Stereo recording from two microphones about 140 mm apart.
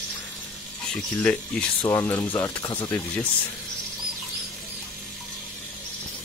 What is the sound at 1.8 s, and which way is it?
Speech, 25° left (ahead or behind).